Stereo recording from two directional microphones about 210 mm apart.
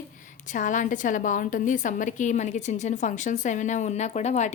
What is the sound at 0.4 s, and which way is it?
A woman's voice, 35° left (ahead or behind).